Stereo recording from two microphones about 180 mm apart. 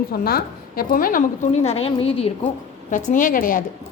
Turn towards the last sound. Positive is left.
turn(degrees=50)  # may be behind; listen again after turning